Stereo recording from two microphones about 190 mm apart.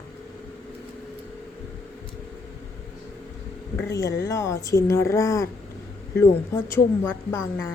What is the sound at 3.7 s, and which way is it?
Speech, 15° left (ahead or behind).